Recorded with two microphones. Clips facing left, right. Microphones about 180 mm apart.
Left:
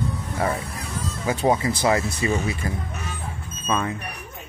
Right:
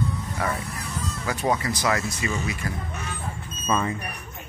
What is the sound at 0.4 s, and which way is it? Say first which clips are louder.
Speech: left 4 dB; 25° left (ahead or behind).